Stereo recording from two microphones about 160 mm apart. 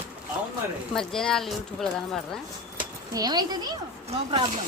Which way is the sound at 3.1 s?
25° right (ahead or behind).